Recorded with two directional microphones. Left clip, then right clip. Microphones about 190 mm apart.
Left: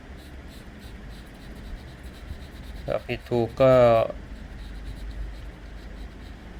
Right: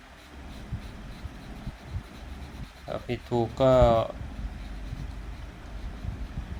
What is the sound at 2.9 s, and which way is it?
Speech, 20° left (ahead or behind).